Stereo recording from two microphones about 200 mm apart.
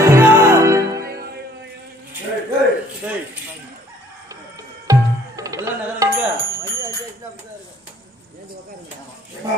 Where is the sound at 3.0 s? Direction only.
10° right (ahead or behind).